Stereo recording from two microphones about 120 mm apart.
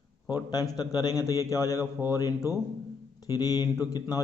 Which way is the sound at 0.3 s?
30° left (ahead or behind).